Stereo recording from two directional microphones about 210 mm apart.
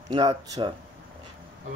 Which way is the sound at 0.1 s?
20° right (ahead or behind).